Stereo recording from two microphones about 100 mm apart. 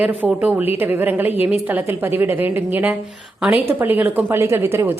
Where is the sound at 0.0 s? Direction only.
15° right (ahead or behind).